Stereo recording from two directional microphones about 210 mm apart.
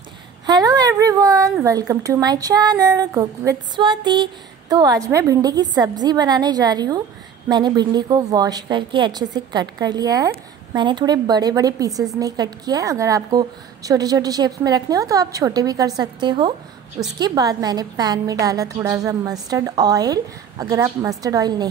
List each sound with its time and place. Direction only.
0.5 s a woman's voice: 20° right (ahead or behind)